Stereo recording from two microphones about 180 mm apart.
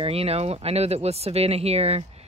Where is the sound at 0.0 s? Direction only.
35° right (ahead or behind).